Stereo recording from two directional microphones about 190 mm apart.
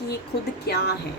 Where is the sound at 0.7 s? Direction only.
55° left (ahead or behind).